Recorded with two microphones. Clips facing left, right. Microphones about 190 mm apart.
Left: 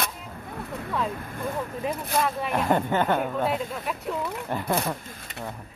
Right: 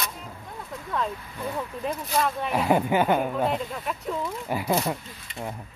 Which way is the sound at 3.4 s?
Centre (ahead or behind).